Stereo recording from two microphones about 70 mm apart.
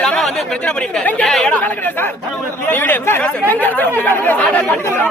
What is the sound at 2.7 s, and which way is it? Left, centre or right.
Speech, left.